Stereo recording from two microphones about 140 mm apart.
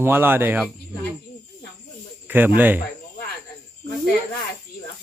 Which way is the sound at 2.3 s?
15° right (ahead or behind).